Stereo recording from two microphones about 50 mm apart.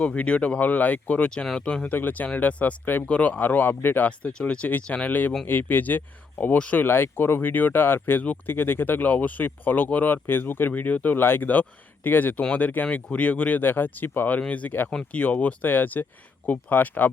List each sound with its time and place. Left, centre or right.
0.0 s speech: left
1.9 s speech: left
4.2 s speech: centre
5.5 s speech: left
11.2 s speech: left
12.4 s speech: left
14.3 s speech: left